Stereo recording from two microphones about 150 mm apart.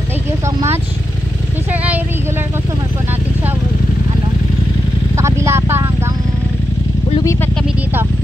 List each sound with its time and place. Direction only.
5.1 s vehicle: 20° right (ahead or behind)